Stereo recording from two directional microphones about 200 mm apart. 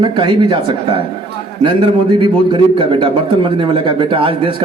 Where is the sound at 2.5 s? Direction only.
25° right (ahead or behind).